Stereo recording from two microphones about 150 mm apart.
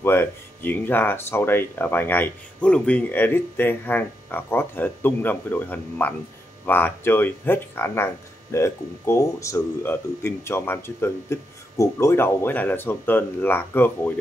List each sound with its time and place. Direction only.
0.0 s speech: 15° left (ahead or behind)